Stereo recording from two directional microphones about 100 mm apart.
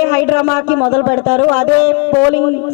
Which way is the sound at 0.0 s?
25° left (ahead or behind).